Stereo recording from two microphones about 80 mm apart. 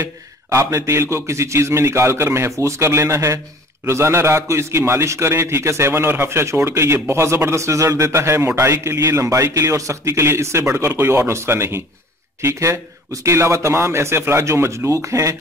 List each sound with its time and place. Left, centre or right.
0.0 s a man's voice: right